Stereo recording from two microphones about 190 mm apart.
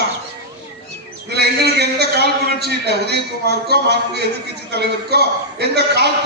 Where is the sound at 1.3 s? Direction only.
60° right (ahead or behind).